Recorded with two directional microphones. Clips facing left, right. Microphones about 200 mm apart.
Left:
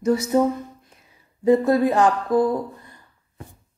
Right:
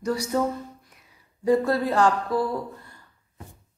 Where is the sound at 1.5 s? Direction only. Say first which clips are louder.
Left 5 dB; 20° left (ahead or behind).